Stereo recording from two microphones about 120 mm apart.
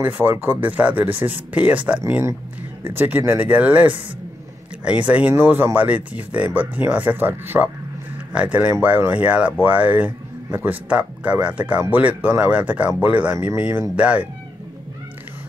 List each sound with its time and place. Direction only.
0.0 s a man's voice: 15° right (ahead or behind)